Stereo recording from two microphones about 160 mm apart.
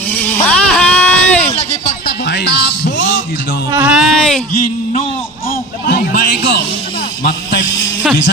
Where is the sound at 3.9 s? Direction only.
Centre (ahead or behind).